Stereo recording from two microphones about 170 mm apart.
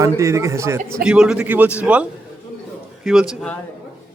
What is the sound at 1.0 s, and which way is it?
A man's voice, 5° right (ahead or behind).